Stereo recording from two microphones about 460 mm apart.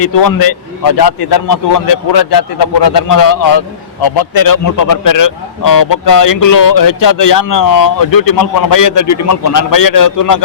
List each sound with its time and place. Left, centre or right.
0.0 s a man's voice: left